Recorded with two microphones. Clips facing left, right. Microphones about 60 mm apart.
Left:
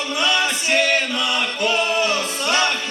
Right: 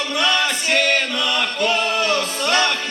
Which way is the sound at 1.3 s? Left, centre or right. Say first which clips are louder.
Right 2 dB; left.